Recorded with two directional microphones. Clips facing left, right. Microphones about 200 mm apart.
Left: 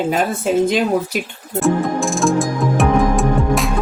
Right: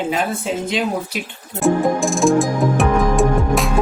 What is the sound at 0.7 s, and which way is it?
Speech, 45° left (ahead or behind).